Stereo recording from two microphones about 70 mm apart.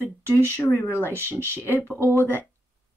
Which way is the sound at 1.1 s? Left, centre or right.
Right.